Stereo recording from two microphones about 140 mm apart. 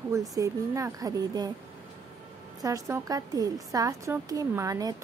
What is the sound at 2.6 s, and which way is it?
A woman's voice, 25° right (ahead or behind).